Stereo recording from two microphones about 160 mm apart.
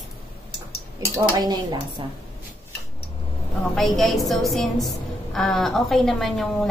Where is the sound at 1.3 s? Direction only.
25° right (ahead or behind).